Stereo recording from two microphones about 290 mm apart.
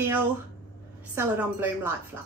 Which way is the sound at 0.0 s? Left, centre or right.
Centre.